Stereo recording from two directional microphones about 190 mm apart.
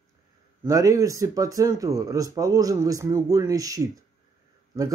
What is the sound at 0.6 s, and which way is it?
Speech, 15° right (ahead or behind).